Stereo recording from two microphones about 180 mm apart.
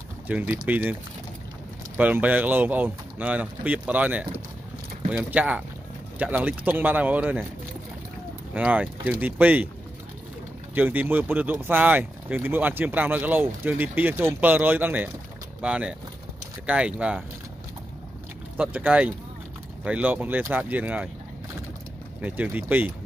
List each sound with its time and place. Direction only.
0.3 s speech: 10° right (ahead or behind)
2.0 s speech: 10° right (ahead or behind)
8.5 s speech: 5° right (ahead or behind)
10.7 s speech: 10° right (ahead or behind)
18.6 s speech: 10° right (ahead or behind)
22.2 s speech: 10° right (ahead or behind)